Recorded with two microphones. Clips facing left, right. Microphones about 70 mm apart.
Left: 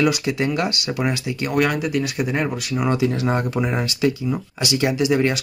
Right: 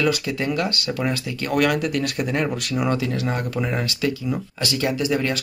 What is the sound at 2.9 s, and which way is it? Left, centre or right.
Speech, left.